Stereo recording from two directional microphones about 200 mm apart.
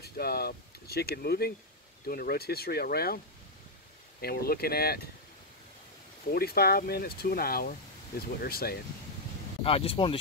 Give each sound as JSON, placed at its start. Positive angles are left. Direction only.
{"t": 0.0, "sound": "speech", "side_deg": 50}
{"t": 4.2, "sound": "speech", "side_deg": 50}
{"t": 6.3, "sound": "speech", "side_deg": 50}
{"t": 9.6, "sound": "speech", "side_deg": 30}